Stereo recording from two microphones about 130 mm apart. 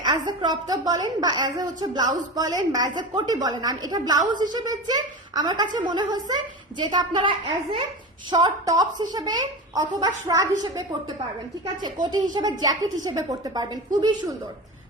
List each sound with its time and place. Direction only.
0.0 s a woman's voice: 35° right (ahead or behind)
12.3 s a woman's voice: 35° right (ahead or behind)